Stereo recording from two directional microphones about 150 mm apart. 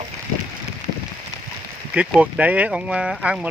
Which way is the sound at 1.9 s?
10° right (ahead or behind).